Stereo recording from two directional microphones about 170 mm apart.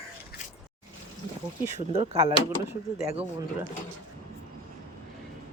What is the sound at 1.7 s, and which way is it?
Speech, 35° right (ahead or behind).